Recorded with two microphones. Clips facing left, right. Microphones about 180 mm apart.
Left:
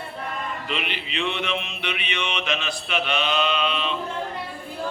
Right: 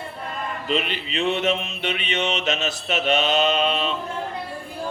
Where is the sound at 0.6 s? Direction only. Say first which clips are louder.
Right 5 dB; 40° right (ahead or behind).